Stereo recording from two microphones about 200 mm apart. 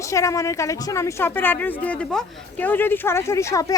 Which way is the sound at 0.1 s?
15° left (ahead or behind).